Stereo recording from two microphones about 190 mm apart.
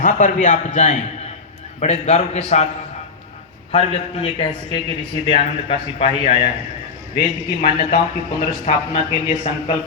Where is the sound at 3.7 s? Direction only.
30° left (ahead or behind).